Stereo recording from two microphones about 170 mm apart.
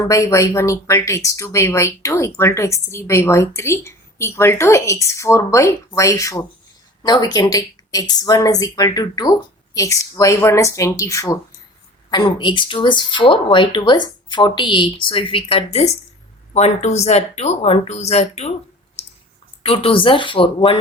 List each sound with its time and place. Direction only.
0.0 s speech: 20° left (ahead or behind); by 18.5 s 40° left (ahead or behind)
19.6 s speech: 35° left (ahead or behind)